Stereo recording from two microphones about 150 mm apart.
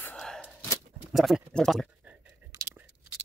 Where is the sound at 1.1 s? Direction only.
Centre (ahead or behind).